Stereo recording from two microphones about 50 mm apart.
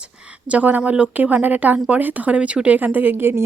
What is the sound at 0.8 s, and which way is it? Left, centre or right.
Speech, right.